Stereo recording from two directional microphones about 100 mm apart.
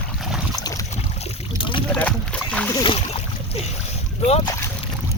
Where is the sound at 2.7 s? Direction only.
50° left (ahead or behind).